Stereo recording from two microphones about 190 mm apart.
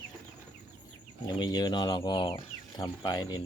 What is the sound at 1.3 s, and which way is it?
Speech, 20° left (ahead or behind).